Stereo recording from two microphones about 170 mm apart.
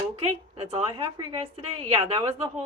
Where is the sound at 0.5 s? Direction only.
35° right (ahead or behind).